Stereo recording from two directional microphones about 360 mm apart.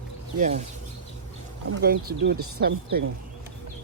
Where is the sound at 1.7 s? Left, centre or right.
Right.